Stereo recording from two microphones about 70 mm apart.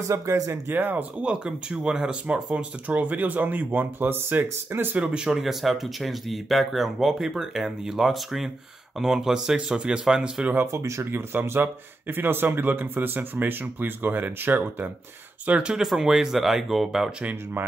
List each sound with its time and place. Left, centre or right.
0.1 s speech: right
0.7 s speech: right
1.2 s speech: centre
4.9 s speech: centre
10.7 s speech: right
15.4 s speech: centre
17.2 s speech: right